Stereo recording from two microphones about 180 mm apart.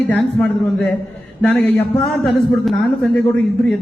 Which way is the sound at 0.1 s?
5° left (ahead or behind).